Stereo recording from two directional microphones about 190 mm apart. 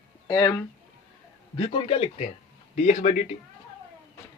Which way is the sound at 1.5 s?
30° left (ahead or behind).